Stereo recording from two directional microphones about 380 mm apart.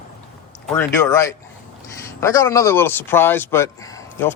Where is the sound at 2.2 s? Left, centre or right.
Centre.